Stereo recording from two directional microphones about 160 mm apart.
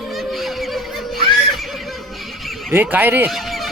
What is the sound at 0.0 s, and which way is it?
Snicker, centre (ahead or behind).